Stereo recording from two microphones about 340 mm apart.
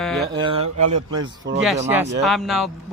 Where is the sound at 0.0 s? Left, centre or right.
Centre.